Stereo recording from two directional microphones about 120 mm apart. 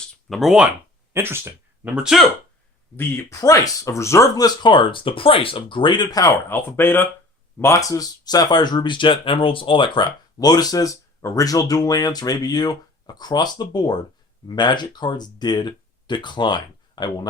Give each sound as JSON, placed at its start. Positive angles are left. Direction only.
{"t": 0.3, "sound": "speech", "side_deg": 0}
{"t": 1.1, "sound": "a sound", "side_deg": -20}
{"t": 2.0, "sound": "speech", "side_deg": -5}
{"t": 2.9, "sound": "speech", "side_deg": 20}
{"t": 6.5, "sound": "speech", "side_deg": 20}